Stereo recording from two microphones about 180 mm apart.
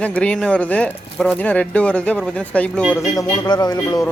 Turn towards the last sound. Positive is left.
turn(degrees=20)  # may be behind; listen again after turning